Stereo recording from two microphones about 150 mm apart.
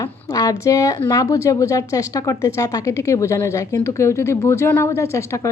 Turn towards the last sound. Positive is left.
turn(degrees=20)  # may be behind; listen again after turning